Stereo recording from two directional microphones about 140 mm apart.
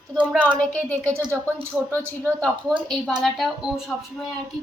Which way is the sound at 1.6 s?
15° right (ahead or behind).